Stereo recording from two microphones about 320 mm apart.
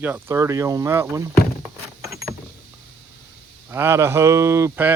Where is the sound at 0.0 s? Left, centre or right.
Centre.